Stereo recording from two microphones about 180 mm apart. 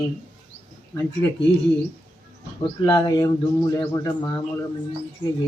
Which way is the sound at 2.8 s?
20° left (ahead or behind).